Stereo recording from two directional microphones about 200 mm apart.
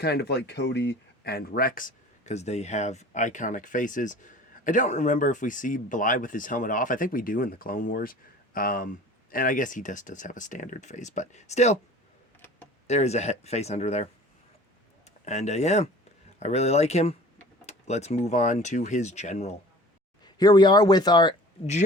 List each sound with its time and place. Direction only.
0.0 s speech: 55° left (ahead or behind); by 11.8 s 35° left (ahead or behind)
12.9 s speech: 35° left (ahead or behind)
15.2 s speech: 35° left (ahead or behind)
17.7 s a sound: 35° left (ahead or behind)
18.3 s speech: 35° left (ahead or behind)
20.2 s speech: 20° left (ahead or behind)